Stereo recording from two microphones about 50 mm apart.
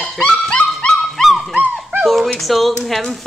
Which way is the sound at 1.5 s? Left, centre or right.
Right.